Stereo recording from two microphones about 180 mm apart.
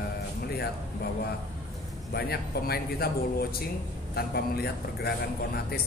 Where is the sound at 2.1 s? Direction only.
60° left (ahead or behind).